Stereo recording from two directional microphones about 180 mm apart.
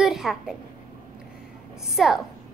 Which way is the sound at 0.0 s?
Centre (ahead or behind).